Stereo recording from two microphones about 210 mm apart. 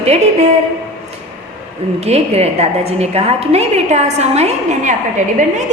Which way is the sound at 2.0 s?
30° right (ahead or behind).